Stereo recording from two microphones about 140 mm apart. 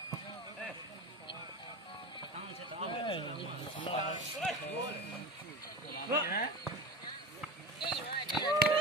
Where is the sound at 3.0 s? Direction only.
35° left (ahead or behind).